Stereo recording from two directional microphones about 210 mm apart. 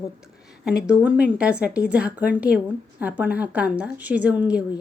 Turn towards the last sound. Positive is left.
turn(degrees=-5)  # may be behind; listen again after turning